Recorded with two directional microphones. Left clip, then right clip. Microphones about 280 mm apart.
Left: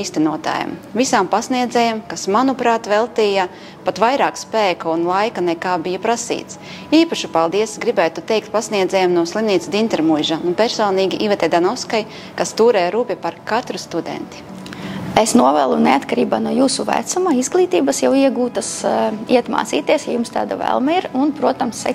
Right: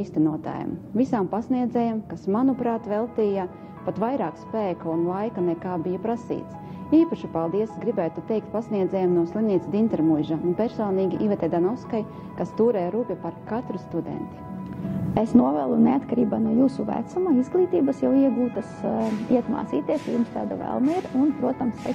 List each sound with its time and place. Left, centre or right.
0.0 s a woman's voice: centre
15.4 s a woman's voice: centre
20.7 s speech: left